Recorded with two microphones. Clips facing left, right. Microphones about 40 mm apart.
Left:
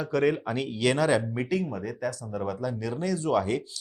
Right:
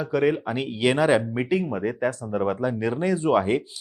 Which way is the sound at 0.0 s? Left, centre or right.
Centre.